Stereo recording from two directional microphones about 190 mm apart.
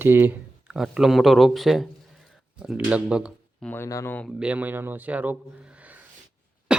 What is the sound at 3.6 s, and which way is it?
Speech, 10° left (ahead or behind).